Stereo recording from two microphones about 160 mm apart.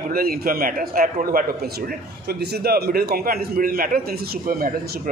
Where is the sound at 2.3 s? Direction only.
85° right.